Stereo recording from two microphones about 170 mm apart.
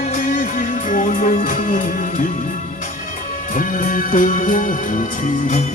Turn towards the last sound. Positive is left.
turn(degrees=50)  # may be behind; listen again after turning